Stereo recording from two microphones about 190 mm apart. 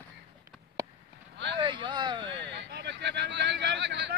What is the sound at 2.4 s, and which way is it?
Speech, 65° right (ahead or behind).